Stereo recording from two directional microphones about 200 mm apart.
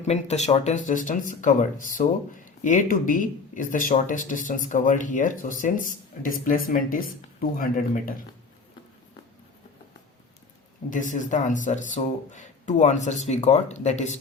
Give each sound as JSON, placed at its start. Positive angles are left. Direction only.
{"t": 0.0, "sound": "speech", "side_deg": 35}
{"t": 10.8, "sound": "speech", "side_deg": 40}